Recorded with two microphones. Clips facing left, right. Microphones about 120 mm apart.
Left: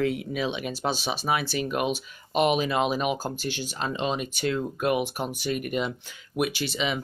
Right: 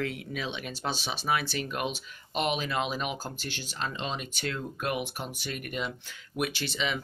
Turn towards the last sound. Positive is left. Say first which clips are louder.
# left 4 dB
turn(degrees=15)  # may be behind; listen again after turning